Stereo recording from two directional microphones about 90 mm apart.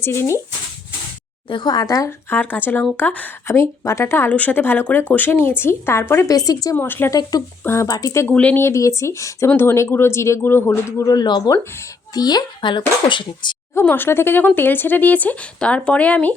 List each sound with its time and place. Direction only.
0.0 s speech: 30° left (ahead or behind)
1.5 s speech: 55° left (ahead or behind)
2.0 s speech: 20° left (ahead or behind)
3.4 s speech: 30° left (ahead or behind)
4.3 s speech: 15° left (ahead or behind)
6.2 s speech: 40° left (ahead or behind)
6.7 s speech: 20° left (ahead or behind)
7.1 s speech: 45° left (ahead or behind)
7.6 s speech: 30° left (ahead or behind)
7.9 s speech: 40° left (ahead or behind)
8.3 s speech: 15° left (ahead or behind)
8.6 s speech: 35° left (ahead or behind)
11.1 s speech: 55° left (ahead or behind)
13.7 s speech: 20° left (ahead or behind)